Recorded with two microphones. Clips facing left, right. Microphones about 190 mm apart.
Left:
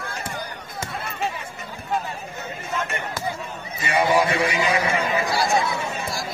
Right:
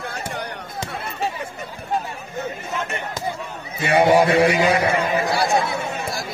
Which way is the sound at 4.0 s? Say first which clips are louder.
Right 5 dB; 65° right (ahead or behind).